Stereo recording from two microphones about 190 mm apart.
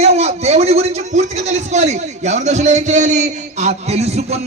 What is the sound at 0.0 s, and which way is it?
Speech, 35° right (ahead or behind).